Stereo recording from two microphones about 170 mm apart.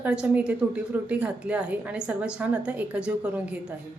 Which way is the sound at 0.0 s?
5° right (ahead or behind).